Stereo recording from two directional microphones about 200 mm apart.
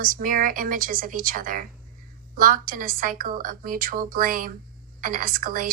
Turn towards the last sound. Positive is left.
turn(degrees=-45)  # may be behind; listen again after turning